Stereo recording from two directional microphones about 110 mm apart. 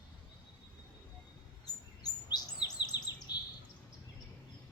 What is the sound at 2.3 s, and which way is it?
Chirp, 40° left (ahead or behind).